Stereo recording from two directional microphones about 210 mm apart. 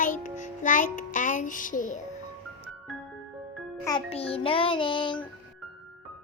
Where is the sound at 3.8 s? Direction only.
25° left (ahead or behind).